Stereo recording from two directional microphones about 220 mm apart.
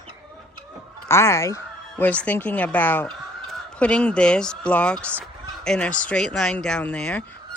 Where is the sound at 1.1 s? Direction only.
10° left (ahead or behind).